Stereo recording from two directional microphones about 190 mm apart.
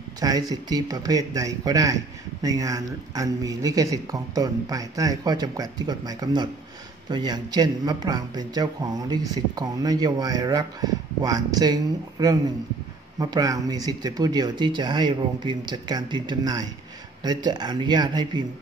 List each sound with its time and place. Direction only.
0.2 s a man's voice: 20° right (ahead or behind)